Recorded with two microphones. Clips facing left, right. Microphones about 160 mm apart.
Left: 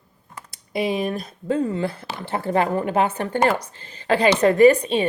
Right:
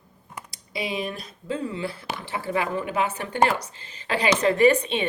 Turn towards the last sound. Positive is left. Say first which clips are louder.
# left 5 dB
turn(degrees=40)  # may be behind; listen again after turning